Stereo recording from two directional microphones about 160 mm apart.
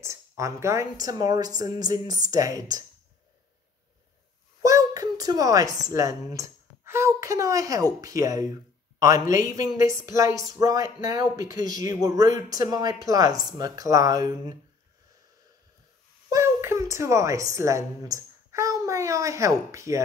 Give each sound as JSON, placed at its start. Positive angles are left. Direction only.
{"t": 0.0, "sound": "a woman's voice", "side_deg": -15}
{"t": 4.6, "sound": "a sound", "side_deg": -20}
{"t": 5.9, "sound": "a woman's voice", "side_deg": -20}
{"t": 16.3, "sound": "a woman's voice", "side_deg": -20}